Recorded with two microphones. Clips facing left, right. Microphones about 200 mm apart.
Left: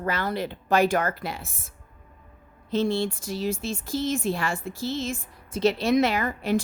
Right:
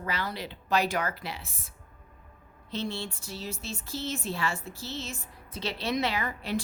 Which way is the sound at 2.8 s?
90° left.